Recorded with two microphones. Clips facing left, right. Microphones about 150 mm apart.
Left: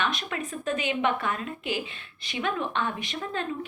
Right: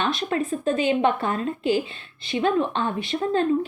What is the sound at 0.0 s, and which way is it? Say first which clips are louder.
A woman's voice: right 6 dB; 35° right (ahead or behind).